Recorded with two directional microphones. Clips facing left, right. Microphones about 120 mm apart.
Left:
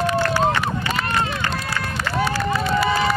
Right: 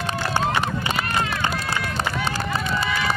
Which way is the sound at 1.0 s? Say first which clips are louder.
Left 2 dB; 30° left (ahead or behind).